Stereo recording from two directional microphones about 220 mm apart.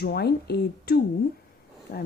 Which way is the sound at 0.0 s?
45° left (ahead or behind).